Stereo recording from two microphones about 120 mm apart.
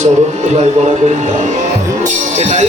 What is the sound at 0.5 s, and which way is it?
A man's voice, 75° right (ahead or behind).